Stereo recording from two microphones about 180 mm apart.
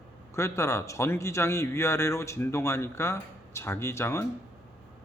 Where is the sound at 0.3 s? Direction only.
15° left (ahead or behind).